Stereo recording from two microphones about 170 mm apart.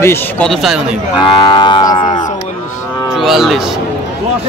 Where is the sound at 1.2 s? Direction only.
25° left (ahead or behind).